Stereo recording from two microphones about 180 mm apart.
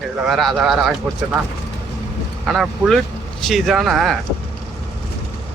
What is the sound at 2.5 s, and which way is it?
Speech, centre (ahead or behind).